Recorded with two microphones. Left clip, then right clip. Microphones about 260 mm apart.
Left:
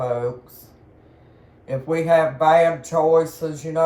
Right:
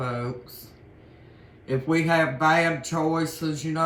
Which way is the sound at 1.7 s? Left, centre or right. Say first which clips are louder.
Left 5 dB; right.